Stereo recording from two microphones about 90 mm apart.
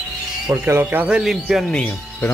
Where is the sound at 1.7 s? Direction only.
15° left (ahead or behind).